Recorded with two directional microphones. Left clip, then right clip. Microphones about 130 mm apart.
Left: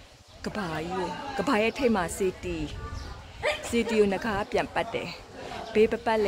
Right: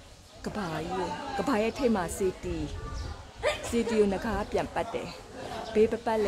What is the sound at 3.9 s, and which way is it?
A woman's voice, 25° left (ahead or behind).